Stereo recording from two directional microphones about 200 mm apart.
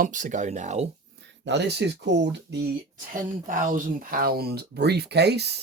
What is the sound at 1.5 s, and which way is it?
Speech, 60° right (ahead or behind).